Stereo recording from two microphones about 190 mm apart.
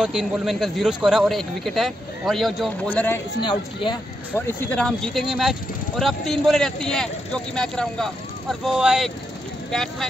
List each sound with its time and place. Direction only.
0.0 s a man's voice: 5° right (ahead or behind)
3.4 s speech: 25° left (ahead or behind)
4.3 s a man's voice: 10° left (ahead or behind)